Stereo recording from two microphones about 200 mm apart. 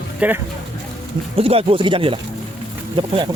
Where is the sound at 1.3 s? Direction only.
30° right (ahead or behind).